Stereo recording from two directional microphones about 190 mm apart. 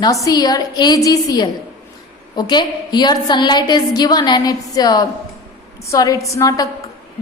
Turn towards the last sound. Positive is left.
turn(degrees=15)  # may be behind; listen again after turning